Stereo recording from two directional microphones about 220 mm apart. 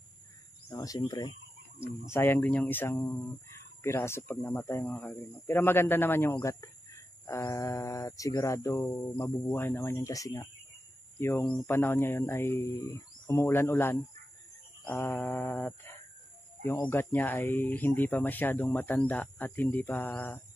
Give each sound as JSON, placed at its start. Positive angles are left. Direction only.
{"t": 0.7, "sound": "speech", "side_deg": 15}